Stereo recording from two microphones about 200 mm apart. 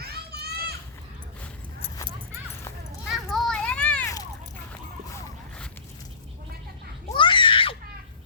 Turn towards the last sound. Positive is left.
turn(degrees=25)  # may be behind; listen again after turning